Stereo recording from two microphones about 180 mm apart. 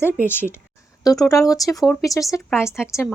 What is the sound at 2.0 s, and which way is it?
Speech, 20° left (ahead or behind).